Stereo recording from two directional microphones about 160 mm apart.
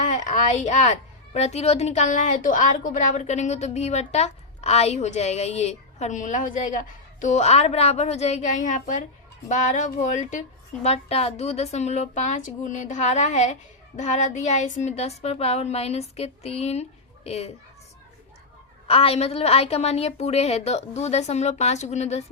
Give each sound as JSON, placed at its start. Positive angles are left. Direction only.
{"t": 0.0, "sound": "a woman's voice", "side_deg": 50}
{"t": 10.8, "sound": "a woman's voice", "side_deg": 40}
{"t": 18.9, "sound": "a woman's voice", "side_deg": 35}